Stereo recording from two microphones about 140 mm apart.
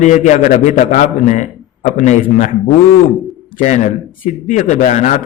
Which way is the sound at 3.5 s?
65° left (ahead or behind).